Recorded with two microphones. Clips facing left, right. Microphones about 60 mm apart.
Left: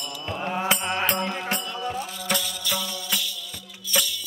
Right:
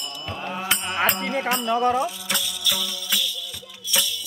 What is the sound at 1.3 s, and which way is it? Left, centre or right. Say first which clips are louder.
Music: right 7 dB; right.